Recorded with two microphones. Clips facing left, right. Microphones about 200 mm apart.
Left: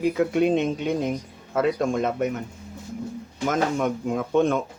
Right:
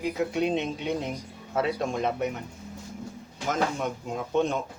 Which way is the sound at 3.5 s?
55° left (ahead or behind).